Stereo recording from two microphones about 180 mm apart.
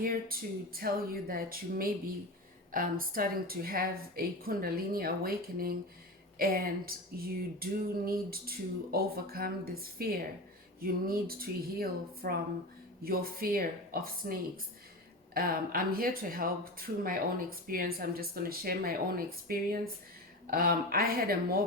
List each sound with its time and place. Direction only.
0.0 s speech: 55° right (ahead or behind)